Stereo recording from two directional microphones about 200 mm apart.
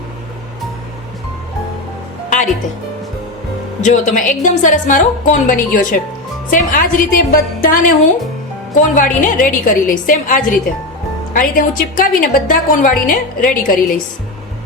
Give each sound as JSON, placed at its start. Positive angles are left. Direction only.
{"t": 3.8, "sound": "a woman's voice", "side_deg": 35}